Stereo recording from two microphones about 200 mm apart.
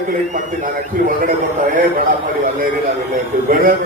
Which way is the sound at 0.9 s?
45° right (ahead or behind).